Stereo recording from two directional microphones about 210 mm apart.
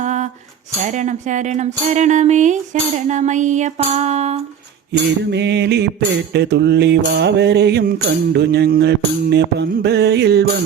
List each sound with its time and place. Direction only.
0.0 s a sound: 35° right (ahead or behind)
0.9 s speech: 35° right (ahead or behind)
4.9 s mantra: 55° right (ahead or behind)